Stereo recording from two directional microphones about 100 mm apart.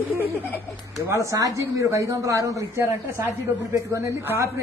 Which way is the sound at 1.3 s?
35° right (ahead or behind).